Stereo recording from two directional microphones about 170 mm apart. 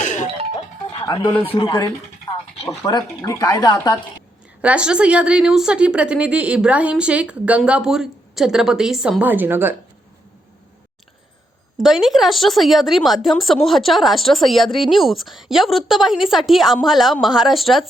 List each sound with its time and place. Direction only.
0.0 s music: 45° left (ahead or behind)
0.5 s music: 25° left (ahead or behind)
2.6 s speech: 20° left (ahead or behind)
4.6 s a woman's voice: 5° right (ahead or behind)
11.8 s a woman's voice: centre (ahead or behind)